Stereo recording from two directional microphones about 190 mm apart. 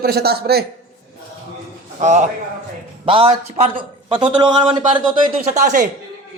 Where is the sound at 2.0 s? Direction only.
40° right (ahead or behind).